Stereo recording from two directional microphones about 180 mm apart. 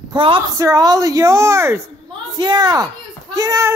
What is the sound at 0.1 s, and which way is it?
Speech, 30° right (ahead or behind).